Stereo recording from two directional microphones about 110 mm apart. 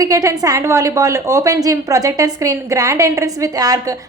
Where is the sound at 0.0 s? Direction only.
30° right (ahead or behind).